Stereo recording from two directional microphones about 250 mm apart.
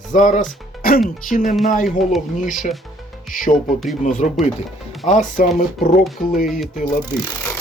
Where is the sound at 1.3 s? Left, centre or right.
Left.